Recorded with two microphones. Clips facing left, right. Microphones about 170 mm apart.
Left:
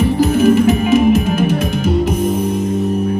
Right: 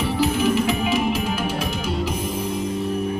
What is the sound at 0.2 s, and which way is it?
Music, 45° left (ahead or behind).